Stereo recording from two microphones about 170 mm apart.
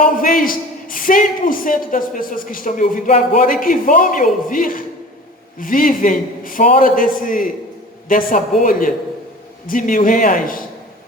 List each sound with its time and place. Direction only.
0.0 s a man's voice: 55° left (ahead or behind)